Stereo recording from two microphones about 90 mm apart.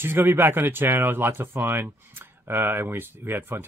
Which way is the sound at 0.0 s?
25° right (ahead or behind).